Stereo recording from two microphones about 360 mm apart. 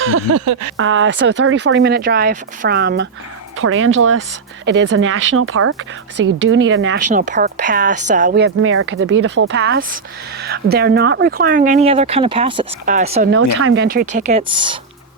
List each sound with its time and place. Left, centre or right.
0.0 s speech: right
0.8 s speech: right
6.1 s a woman's voice: right
6.5 s speech: right
7.1 s speech: right
13.3 s speech: right; by 14.8 s centre